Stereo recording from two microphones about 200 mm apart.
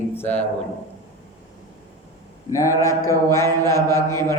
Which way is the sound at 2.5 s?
15° left (ahead or behind).